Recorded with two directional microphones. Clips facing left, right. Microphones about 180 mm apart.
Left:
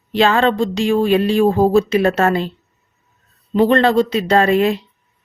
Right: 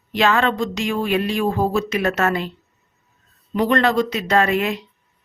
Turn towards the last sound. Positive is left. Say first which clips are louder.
# left 5 dB
turn(degrees=30)  # may be behind; listen again after turning